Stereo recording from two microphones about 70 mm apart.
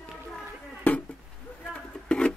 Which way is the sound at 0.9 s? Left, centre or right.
Left.